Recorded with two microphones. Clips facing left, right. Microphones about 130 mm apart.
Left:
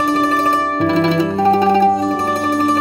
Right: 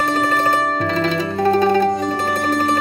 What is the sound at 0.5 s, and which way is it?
Music, 20° left (ahead or behind).